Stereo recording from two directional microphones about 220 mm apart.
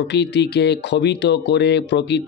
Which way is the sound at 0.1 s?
50° left (ahead or behind).